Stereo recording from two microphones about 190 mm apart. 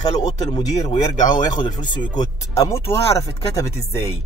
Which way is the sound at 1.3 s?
25° left (ahead or behind).